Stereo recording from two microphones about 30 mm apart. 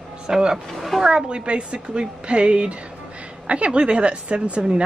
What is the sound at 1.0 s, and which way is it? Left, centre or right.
Speech, right.